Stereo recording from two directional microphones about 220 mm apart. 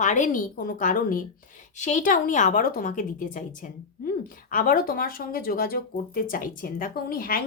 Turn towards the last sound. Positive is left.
turn(degrees=40)  # may be behind; listen again after turning